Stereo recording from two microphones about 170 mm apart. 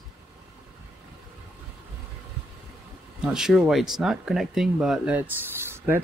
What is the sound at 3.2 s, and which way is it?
Speech, 5° right (ahead or behind).